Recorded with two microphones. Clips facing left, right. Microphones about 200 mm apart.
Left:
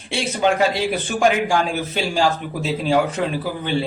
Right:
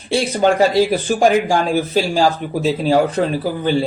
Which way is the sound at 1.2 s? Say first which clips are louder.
Right 2 dB; 40° right (ahead or behind).